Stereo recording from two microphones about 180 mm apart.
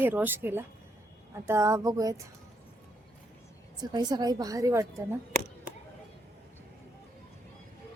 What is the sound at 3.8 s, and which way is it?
A woman's voice, 20° right (ahead or behind).